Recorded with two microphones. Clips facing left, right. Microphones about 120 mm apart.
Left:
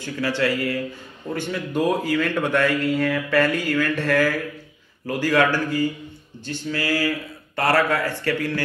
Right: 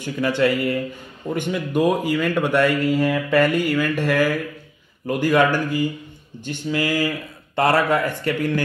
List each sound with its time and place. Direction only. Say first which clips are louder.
0.0 s speech: right 3 dB; 20° right (ahead or behind)